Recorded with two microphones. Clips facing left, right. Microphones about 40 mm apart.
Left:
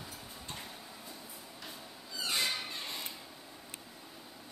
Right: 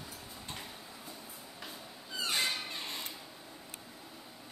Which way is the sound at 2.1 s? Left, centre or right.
Right.